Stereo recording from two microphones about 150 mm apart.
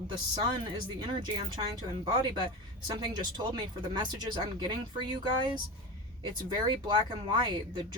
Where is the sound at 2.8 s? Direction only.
30° right (ahead or behind).